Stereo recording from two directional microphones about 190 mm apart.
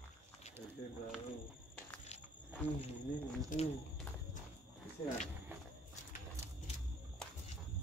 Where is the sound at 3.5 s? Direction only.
45° left (ahead or behind).